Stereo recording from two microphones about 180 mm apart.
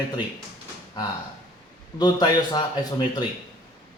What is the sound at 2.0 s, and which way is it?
A man's voice, 20° left (ahead or behind).